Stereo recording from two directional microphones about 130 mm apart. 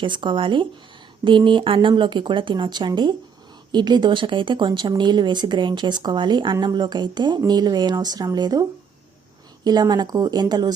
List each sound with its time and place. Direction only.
0.0 s speech: 40° right (ahead or behind)
9.6 s speech: 30° right (ahead or behind)